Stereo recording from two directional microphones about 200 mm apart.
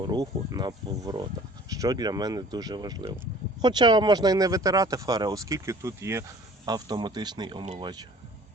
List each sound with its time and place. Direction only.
0.1 s speech: 20° right (ahead or behind)
7.6 s speech: 35° right (ahead or behind)